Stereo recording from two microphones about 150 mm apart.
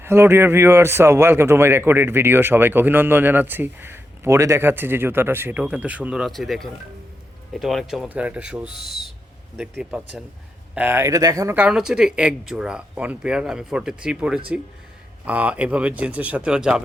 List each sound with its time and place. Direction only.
0.0 s a man's voice: 15° right (ahead or behind)
10.8 s speech: 15° right (ahead or behind)
11.5 s a man's voice: 5° right (ahead or behind)